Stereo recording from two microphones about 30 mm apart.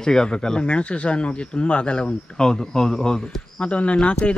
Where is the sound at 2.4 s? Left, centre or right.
Left.